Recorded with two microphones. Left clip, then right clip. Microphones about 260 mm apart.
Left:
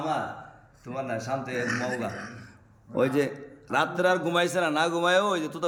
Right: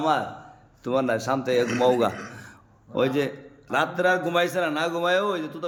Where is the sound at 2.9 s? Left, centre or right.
Centre.